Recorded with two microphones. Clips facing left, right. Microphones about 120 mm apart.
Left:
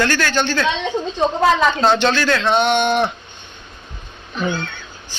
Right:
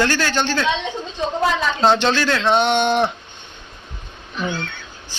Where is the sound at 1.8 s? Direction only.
25° right (ahead or behind).